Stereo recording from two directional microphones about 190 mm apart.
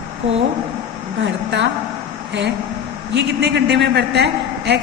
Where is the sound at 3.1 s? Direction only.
65° right (ahead or behind).